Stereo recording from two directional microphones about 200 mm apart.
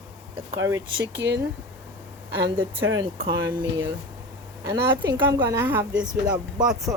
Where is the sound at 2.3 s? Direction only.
25° right (ahead or behind).